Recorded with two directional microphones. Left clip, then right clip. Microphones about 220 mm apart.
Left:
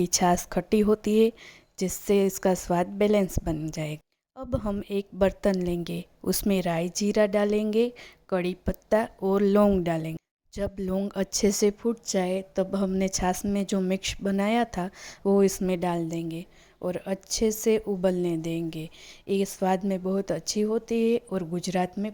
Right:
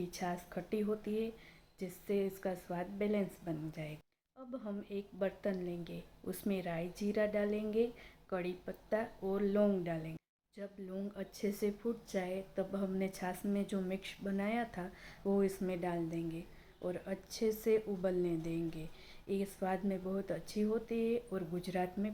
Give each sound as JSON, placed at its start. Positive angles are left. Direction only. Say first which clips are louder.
{"t": 0.0, "sound": "speech", "louder": "left 17 dB", "side_deg": 50}